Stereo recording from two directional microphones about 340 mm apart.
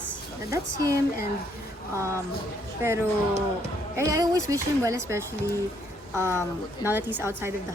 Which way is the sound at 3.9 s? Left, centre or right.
Centre.